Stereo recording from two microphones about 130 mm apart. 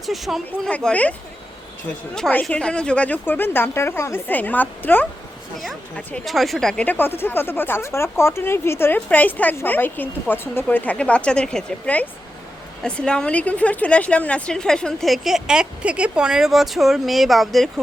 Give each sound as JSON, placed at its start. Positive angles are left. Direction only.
{"t": 0.0, "sound": "a woman's voice", "side_deg": 0}
{"t": 2.1, "sound": "speech", "side_deg": 5}
{"t": 6.2, "sound": "a woman's voice", "side_deg": 0}